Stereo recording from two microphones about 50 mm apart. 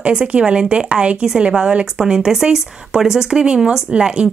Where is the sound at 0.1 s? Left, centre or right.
Centre.